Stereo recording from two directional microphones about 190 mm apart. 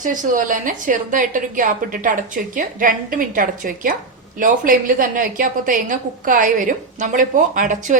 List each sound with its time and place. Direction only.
0.0 s a woman's voice: 45° right (ahead or behind)